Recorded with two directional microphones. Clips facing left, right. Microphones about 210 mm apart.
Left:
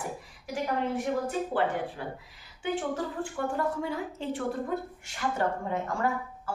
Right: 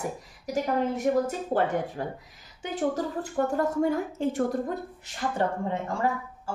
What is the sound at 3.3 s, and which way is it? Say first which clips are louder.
A woman's voice: right 6 dB; 45° right (ahead or behind).